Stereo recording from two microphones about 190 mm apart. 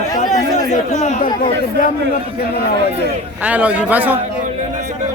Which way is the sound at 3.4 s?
5° right (ahead or behind).